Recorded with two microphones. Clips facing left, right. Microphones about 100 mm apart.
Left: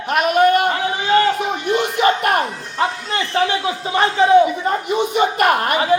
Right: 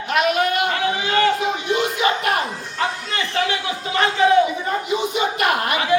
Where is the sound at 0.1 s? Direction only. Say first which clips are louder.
Left 5 dB; 45° left (ahead or behind).